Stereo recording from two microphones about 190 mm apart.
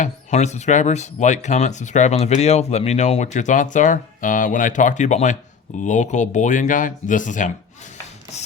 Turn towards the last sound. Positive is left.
turn(degrees=40)  # may be behind; listen again after turning